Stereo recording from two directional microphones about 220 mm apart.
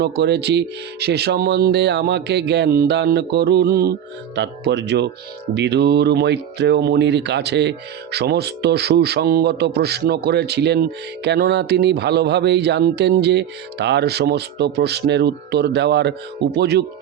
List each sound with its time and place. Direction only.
0.0 s speech: 50° right (ahead or behind)